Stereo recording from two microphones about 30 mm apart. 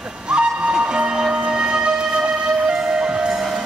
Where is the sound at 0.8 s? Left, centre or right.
Right.